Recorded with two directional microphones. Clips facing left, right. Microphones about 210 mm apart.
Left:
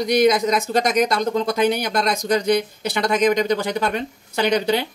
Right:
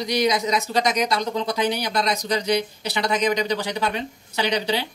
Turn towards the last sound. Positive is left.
turn(degrees=50)  # may be behind; listen again after turning